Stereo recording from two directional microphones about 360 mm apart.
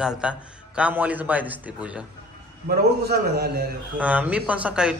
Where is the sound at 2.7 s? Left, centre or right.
Right.